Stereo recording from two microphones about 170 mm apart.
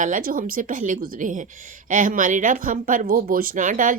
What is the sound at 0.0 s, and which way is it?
Speech, 55° right (ahead or behind).